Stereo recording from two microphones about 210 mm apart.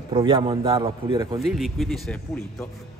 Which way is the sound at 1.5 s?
Centre (ahead or behind).